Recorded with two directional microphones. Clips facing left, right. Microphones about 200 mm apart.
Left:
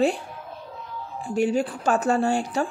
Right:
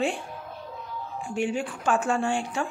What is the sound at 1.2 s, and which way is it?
A woman's voice, 40° left (ahead or behind).